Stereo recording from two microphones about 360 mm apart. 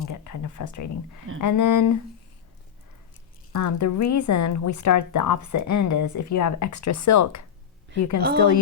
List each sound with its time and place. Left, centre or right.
0.0 s speech: left
3.5 s speech: left